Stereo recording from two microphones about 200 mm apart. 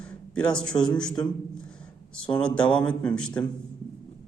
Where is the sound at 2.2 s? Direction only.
5° left (ahead or behind).